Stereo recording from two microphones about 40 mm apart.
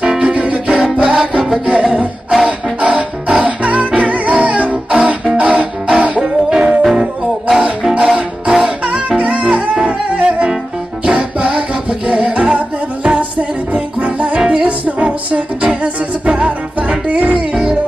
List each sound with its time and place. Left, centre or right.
0.0 s music: right
0.3 s music: right
6.2 s music: centre
7.9 s music: right
17.5 s music: centre